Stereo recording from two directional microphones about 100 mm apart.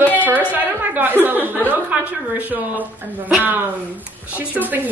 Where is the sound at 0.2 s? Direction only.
15° right (ahead or behind).